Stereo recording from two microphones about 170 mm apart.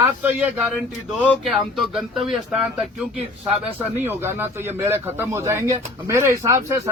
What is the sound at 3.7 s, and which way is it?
A man's voice, 10° right (ahead or behind).